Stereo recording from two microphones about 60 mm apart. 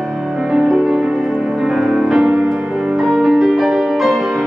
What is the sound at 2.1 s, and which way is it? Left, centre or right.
Music, centre.